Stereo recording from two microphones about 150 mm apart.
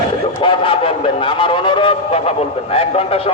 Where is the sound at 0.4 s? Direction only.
35° left (ahead or behind).